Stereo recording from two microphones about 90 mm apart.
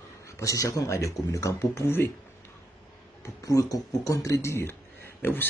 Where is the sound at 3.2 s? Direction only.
40° left (ahead or behind).